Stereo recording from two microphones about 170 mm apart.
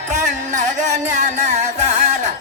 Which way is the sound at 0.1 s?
45° right (ahead or behind).